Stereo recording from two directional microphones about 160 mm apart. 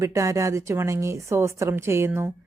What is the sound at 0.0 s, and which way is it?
A woman's voice, 20° right (ahead or behind).